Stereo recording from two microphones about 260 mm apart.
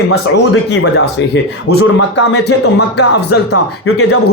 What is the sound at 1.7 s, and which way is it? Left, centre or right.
A man's voice, left.